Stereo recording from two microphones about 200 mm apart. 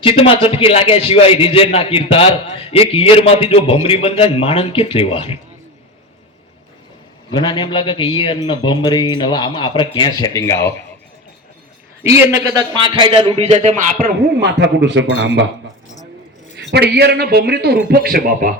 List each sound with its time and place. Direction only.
0.0 s a man's voice: 30° left (ahead or behind)
7.3 s a man's voice: 20° left (ahead or behind)
12.0 s a man's voice: 15° right (ahead or behind); by 15.4 s 60° right (ahead or behind)
16.7 s a man's voice: 55° right (ahead or behind)